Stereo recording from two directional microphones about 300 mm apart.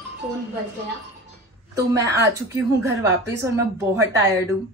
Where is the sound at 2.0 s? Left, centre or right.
Centre.